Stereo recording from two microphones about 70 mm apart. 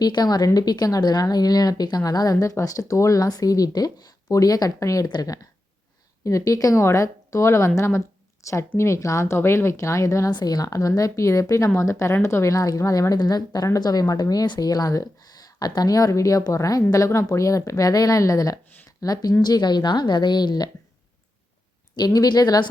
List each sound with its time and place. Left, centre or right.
0.0 s a woman's voice: left
5.0 s speech: left
6.2 s speech: left
9.4 s speech: left
10.3 s a woman's voice: left
19.4 s a woman's voice: left
21.9 s speech: left